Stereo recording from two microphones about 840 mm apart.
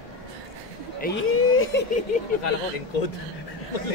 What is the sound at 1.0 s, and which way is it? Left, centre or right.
Speech, centre.